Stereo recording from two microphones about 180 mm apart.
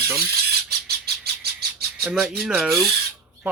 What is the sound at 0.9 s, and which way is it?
Bird, 60° right (ahead or behind).